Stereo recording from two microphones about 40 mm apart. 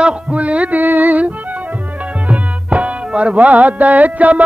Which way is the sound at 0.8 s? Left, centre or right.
Right.